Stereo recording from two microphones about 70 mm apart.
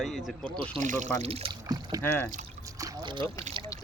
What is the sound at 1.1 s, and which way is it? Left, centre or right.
Speech, left.